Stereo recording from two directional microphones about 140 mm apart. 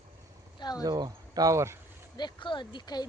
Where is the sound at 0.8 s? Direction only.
30° right (ahead or behind).